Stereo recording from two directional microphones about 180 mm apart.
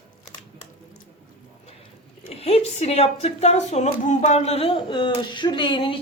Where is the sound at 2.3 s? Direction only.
35° left (ahead or behind).